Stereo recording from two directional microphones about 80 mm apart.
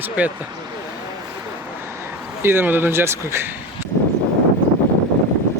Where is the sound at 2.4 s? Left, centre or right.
Right.